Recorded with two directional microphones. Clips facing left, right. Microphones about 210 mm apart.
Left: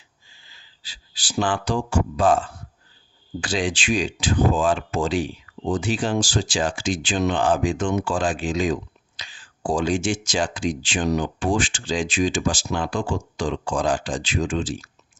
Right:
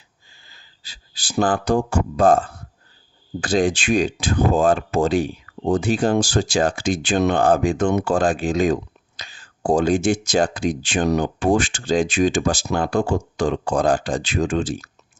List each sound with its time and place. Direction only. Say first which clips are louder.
0.4 s a sound: right 3 dB; 50° right (ahead or behind)
1.3 s speech: right 4 dB; 40° right (ahead or behind)
1.6 s speech: right 4 dB; 55° right (ahead or behind)